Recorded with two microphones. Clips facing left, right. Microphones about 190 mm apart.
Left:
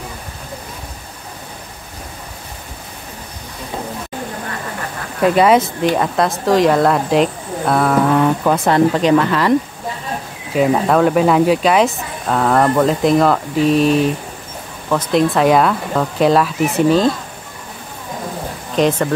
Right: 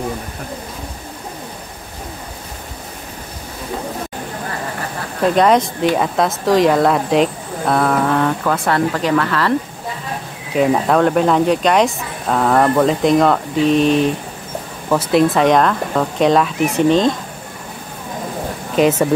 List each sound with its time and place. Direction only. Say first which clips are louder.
5.2 s speech: left 1 dB; 5° left (ahead or behind)
8.6 s a woman's voice: left 5 dB; 20° left (ahead or behind)
10.5 s speech: even; centre (ahead or behind)
18.8 s speech: right 1 dB; 5° right (ahead or behind)